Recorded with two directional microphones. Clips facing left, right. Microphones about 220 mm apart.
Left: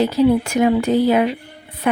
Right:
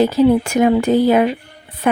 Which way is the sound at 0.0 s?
50° right (ahead or behind).